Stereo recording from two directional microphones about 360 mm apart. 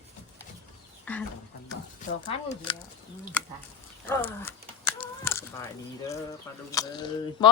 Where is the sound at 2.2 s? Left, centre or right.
Centre.